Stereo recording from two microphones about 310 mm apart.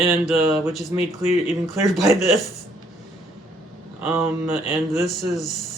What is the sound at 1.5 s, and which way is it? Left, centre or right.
Speech, centre.